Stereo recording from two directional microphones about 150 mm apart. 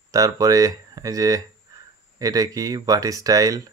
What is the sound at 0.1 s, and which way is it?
Speech, 25° right (ahead or behind).